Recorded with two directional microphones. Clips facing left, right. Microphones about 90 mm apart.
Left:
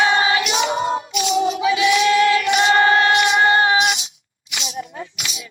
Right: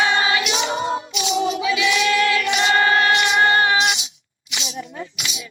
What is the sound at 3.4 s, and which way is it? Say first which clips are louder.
Music: even; 20° left (ahead or behind).